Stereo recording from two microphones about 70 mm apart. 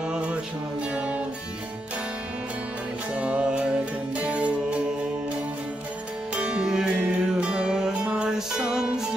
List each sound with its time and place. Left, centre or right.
0.9 s music: centre
3.2 s music: centre
6.3 s music: centre